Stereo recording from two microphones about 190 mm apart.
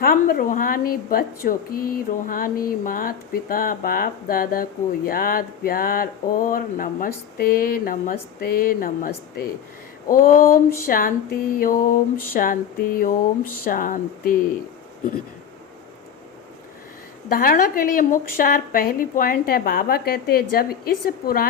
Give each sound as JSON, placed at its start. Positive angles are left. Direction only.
{"t": 0.0, "sound": "a woman's voice", "side_deg": 50}
{"t": 17.2, "sound": "a woman's voice", "side_deg": 50}